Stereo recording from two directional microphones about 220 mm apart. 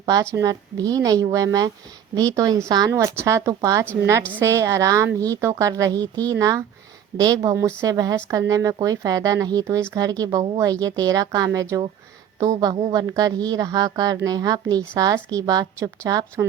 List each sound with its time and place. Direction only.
0.0 s a woman's voice: 15° right (ahead or behind)